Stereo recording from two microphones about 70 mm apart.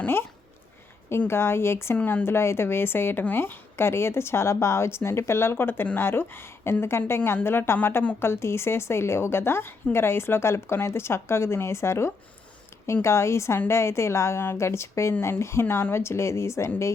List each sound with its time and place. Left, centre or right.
1.3 s a woman's voice: left
2.0 s a woman's voice: left
2.2 s a woman's voice: left